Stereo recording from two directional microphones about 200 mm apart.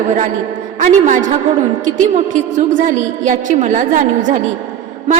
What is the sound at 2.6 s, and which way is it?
A woman's voice, 40° right (ahead or behind).